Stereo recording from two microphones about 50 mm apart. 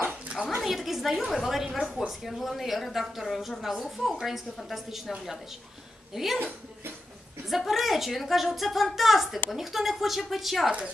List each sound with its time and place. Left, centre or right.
0.3 s a sound: centre
0.7 s speech: centre
6.1 s speech: centre
7.4 s speech: centre